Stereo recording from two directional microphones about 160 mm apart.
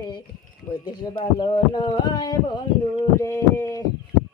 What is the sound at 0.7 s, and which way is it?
Speech, 30° left (ahead or behind).